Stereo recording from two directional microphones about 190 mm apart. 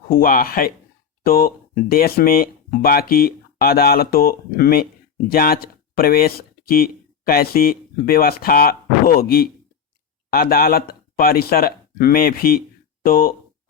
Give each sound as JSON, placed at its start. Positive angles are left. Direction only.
{"t": 0.1, "sound": "speech", "side_deg": 50}